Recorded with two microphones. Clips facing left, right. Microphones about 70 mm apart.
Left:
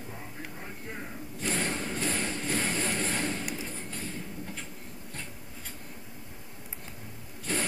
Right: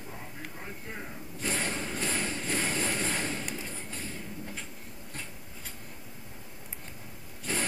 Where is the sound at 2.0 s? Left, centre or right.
Centre.